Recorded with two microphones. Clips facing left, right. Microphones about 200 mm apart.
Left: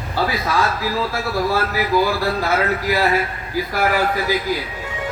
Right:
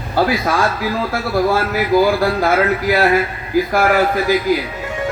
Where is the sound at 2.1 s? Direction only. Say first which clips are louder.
Right 5 dB; 50° right (ahead or behind).